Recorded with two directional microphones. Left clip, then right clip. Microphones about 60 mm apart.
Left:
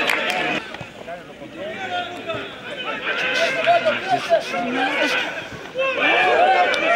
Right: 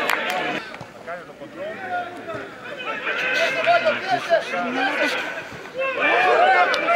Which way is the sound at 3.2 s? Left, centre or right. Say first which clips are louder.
Left 1 dB; left.